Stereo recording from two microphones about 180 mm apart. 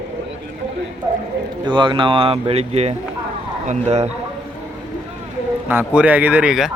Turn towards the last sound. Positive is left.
turn(degrees=-5)  # may be behind; listen again after turning